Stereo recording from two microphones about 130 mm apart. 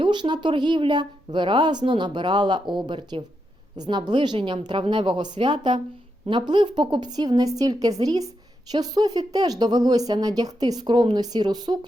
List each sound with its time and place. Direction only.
0.0 s a woman's voice: 35° right (ahead or behind)